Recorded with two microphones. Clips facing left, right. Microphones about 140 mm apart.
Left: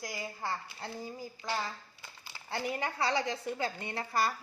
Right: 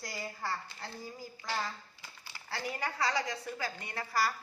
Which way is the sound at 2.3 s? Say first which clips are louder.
Left 4 dB; 20° left (ahead or behind).